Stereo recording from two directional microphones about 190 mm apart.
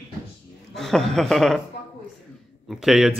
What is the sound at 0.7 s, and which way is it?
Speech, centre (ahead or behind).